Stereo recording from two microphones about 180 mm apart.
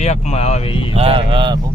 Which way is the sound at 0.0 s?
40° left (ahead or behind).